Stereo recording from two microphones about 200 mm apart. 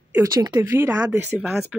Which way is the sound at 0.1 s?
15° right (ahead or behind).